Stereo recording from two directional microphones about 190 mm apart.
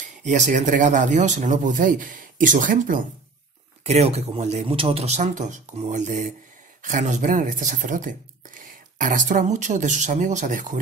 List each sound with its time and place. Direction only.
0.0 s speech: 40° right (ahead or behind)